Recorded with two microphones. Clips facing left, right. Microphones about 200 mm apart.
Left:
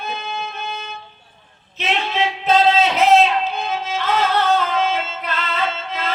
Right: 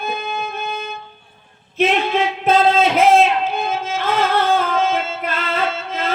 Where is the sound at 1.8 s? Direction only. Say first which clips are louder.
Right 5 dB; 50° right (ahead or behind).